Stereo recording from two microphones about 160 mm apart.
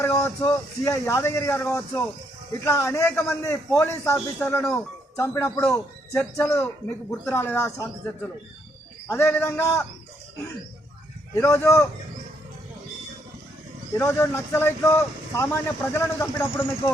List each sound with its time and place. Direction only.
0.0 s speech: 15° left (ahead or behind)
5.1 s speech: 15° left (ahead or behind)
9.0 s speech: 15° left (ahead or behind)
11.3 s speech: 15° left (ahead or behind)
14.0 s speech: 15° left (ahead or behind)